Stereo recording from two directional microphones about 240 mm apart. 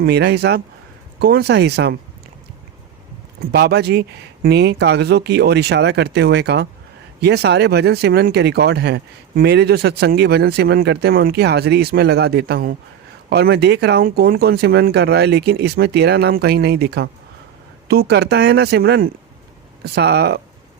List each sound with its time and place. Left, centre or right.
0.0 s speech: right
3.5 s speech: right